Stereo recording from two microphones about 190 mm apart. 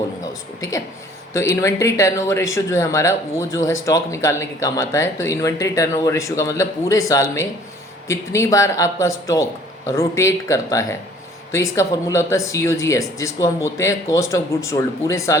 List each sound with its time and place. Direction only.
1.3 s speech: 15° left (ahead or behind)